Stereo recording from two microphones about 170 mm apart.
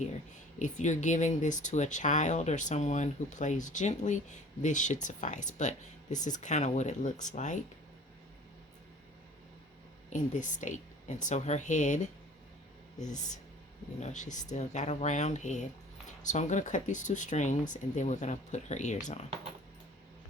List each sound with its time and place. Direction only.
0.6 s speech: 45° left (ahead or behind)
10.1 s speech: 45° left (ahead or behind)
14.0 s speech: 45° left (ahead or behind)